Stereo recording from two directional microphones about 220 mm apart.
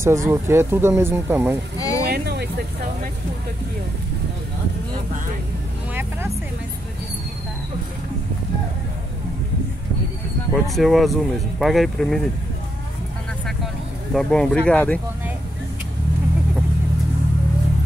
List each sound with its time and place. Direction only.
0.0 s speech: 15° right (ahead or behind)
1.8 s a sound: 15° left (ahead or behind)
2.0 s vehicle: 45° right (ahead or behind)
10.5 s speech: centre (ahead or behind)
14.1 s speech: 5° left (ahead or behind)